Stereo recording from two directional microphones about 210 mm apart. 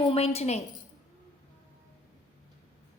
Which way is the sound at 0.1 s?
30° left (ahead or behind).